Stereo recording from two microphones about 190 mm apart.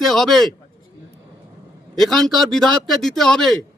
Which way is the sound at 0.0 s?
Centre (ahead or behind).